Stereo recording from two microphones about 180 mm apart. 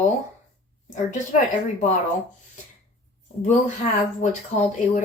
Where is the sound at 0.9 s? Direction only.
40° left (ahead or behind).